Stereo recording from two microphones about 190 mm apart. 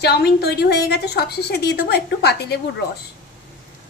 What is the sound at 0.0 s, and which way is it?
A woman's voice, 60° left (ahead or behind).